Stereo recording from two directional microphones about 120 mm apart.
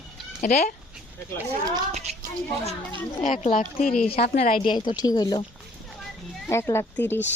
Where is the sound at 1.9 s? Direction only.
65° right (ahead or behind).